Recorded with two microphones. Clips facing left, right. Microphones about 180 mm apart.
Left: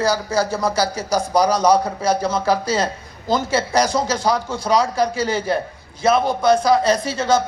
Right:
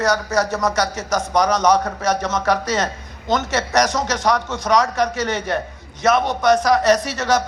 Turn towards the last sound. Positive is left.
turn(degrees=25)  # may be behind; listen again after turning